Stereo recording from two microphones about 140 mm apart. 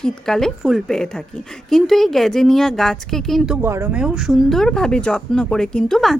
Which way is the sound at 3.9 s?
5° right (ahead or behind).